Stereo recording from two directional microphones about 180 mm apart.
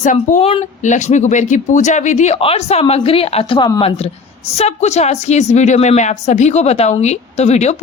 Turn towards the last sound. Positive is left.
turn(degrees=40)  # may be behind; listen again after turning